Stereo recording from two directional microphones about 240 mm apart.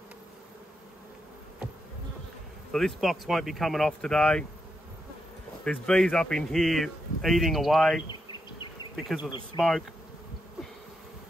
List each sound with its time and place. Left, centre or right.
2.7 s speech: centre
5.6 s speech: centre
8.1 s bee: centre
9.6 s speech: centre